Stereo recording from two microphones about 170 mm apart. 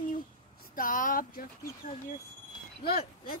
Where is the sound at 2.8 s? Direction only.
60° left (ahead or behind).